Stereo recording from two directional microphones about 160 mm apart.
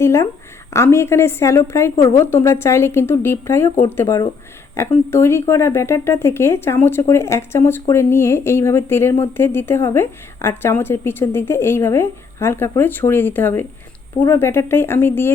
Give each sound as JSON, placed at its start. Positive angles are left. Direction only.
{"t": 0.0, "sound": "speech", "side_deg": 15}